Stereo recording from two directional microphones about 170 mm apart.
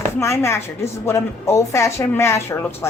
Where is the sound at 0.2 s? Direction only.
15° left (ahead or behind).